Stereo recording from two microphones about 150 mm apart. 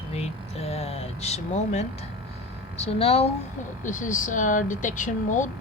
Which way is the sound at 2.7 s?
45° left (ahead or behind).